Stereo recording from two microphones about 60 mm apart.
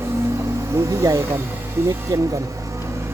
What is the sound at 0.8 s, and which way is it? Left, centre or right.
Speech, right.